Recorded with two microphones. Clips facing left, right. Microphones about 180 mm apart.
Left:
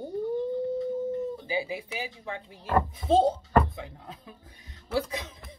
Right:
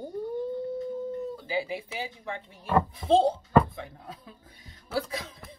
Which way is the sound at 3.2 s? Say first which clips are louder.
Right 1 dB; 20° left (ahead or behind).